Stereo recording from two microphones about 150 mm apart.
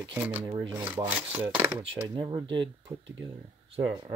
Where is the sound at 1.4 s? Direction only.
15° right (ahead or behind).